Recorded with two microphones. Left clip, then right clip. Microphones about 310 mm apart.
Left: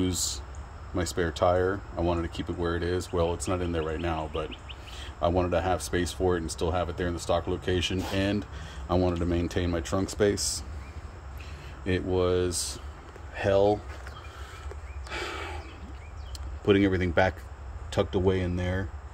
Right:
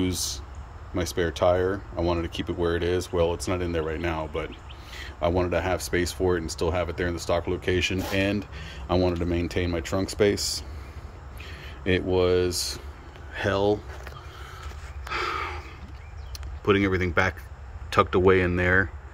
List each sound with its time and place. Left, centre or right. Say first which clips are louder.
0.1 s speech: right 1 dB; centre
1.1 s speech: right 2 dB; centre
11.8 s speech: right 4 dB; centre
15.0 s gasp: right 6 dB; centre
16.6 s speech: right 1 dB; centre